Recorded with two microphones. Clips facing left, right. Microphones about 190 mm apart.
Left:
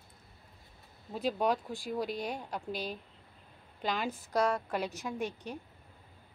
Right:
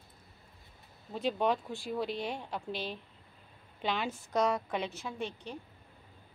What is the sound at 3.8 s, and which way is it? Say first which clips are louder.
A woman's voice: even; centre (ahead or behind).